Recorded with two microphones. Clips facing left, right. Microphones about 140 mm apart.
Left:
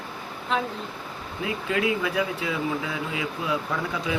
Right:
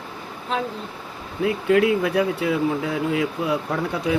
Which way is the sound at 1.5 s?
60° right (ahead or behind).